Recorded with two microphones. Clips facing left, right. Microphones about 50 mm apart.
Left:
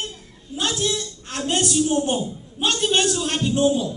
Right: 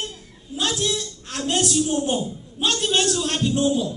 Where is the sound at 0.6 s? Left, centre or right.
Centre.